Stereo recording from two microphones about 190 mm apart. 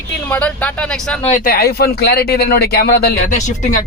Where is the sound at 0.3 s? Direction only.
5° left (ahead or behind).